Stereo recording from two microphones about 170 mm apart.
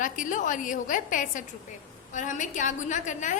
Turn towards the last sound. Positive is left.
turn(degrees=45)  # may be behind; listen again after turning